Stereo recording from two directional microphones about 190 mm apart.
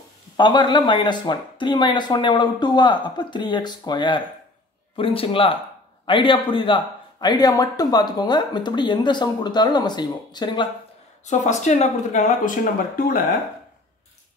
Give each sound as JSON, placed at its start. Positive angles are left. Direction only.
{"t": 0.4, "sound": "speech", "side_deg": 25}
{"t": 11.2, "sound": "speech", "side_deg": 40}